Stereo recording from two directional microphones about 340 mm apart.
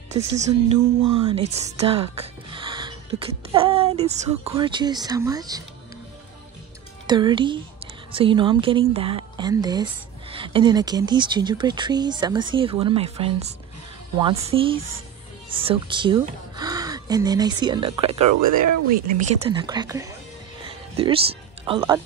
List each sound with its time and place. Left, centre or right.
0.1 s a woman's voice: centre
7.1 s a woman's voice: centre
14.5 s a woman's voice: centre
18.3 s speech: right
19.4 s a woman's voice: centre
20.6 s music: centre
21.6 s a woman's voice: centre